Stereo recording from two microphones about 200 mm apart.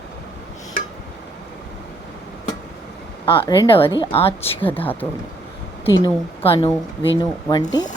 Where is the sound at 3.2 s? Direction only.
25° left (ahead or behind).